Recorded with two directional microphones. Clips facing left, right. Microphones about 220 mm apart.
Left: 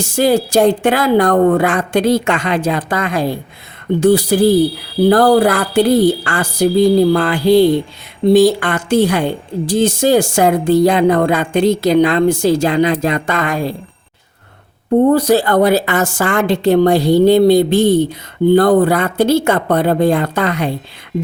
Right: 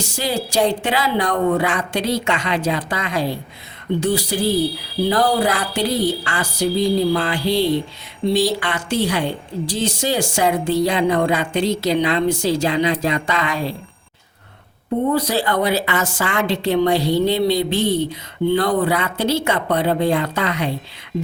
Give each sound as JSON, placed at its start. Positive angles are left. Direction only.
{"t": 0.0, "sound": "a woman's voice", "side_deg": 55}
{"t": 15.1, "sound": "a woman's voice", "side_deg": 50}